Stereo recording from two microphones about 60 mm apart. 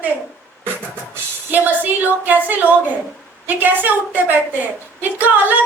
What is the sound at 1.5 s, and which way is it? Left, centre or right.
A woman's voice, right.